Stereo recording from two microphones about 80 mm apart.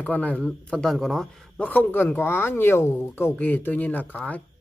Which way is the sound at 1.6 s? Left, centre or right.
Left.